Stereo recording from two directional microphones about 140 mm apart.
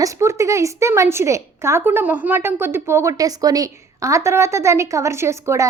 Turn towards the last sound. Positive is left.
turn(degrees=-20)  # may be behind; listen again after turning